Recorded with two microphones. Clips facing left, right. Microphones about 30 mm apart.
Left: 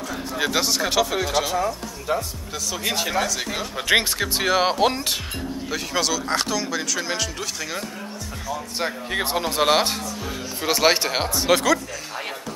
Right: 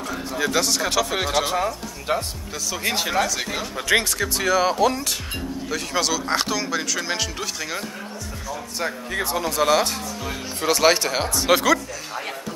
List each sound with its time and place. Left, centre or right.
0.4 s speech: centre
1.4 s speech: right
2.5 s speech: centre
3.7 s speech: centre
5.7 s speech: centre
8.7 s speech: left
10.6 s speech: centre
11.3 s speech: centre